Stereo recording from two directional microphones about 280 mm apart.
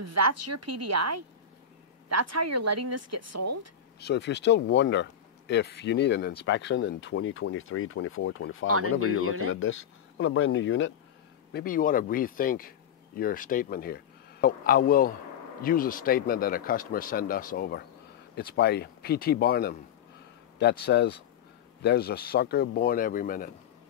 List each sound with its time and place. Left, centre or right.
0.0 s a woman's voice: right
4.0 s speech: left
8.6 s speech: right
9.6 s speech: left
11.5 s speech: left